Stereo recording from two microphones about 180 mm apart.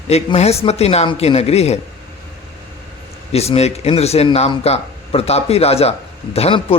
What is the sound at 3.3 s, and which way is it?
A man's voice, 35° left (ahead or behind).